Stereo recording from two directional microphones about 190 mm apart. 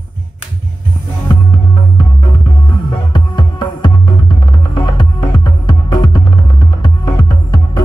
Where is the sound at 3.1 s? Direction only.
25° left (ahead or behind).